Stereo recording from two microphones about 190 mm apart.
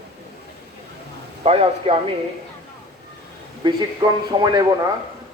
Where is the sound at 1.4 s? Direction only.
30° right (ahead or behind).